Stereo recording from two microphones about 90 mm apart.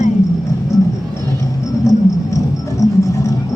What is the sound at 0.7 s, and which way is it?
Music, 40° left (ahead or behind).